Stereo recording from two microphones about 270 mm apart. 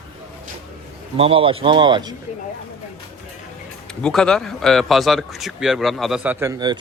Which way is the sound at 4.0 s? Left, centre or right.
Centre.